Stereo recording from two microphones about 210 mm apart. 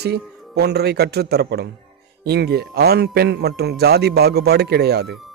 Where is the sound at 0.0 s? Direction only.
50° right (ahead or behind).